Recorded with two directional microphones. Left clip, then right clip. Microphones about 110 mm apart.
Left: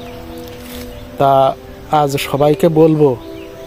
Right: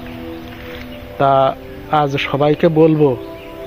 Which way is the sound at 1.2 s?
30° left (ahead or behind).